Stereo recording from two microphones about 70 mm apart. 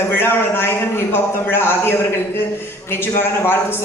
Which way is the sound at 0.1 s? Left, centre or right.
Left.